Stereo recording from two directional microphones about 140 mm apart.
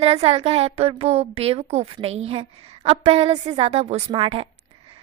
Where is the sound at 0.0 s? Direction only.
45° right (ahead or behind).